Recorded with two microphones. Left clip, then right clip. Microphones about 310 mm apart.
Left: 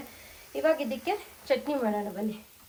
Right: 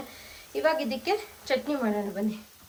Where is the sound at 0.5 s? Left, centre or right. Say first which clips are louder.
Right 1 dB; centre.